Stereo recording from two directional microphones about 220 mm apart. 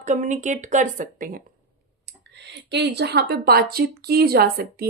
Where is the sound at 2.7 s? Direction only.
50° right (ahead or behind).